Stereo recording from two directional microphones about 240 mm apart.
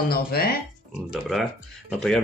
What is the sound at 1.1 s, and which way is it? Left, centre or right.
Speech, centre.